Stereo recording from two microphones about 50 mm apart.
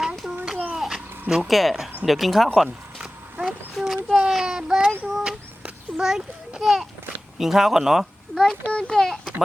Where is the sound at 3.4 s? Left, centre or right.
Right.